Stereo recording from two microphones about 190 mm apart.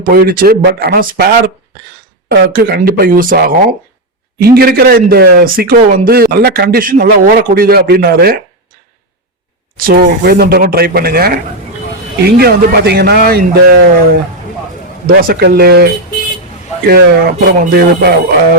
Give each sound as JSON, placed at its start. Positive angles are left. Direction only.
{"t": 0.0, "sound": "speech", "side_deg": -50}
{"t": 2.5, "sound": "speech", "side_deg": -50}
{"t": 9.7, "sound": "a man's voice", "side_deg": -50}
{"t": 16.9, "sound": "a man's voice", "side_deg": -55}